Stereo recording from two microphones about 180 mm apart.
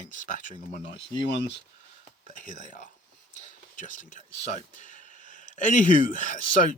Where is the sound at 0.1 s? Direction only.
45° left (ahead or behind).